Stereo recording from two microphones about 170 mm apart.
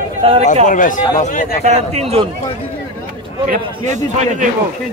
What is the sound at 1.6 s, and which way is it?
Speech, 40° right (ahead or behind).